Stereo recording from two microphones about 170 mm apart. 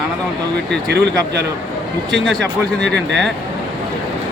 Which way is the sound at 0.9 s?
80° right.